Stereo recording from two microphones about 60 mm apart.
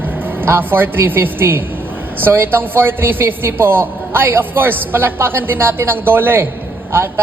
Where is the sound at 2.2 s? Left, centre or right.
Right.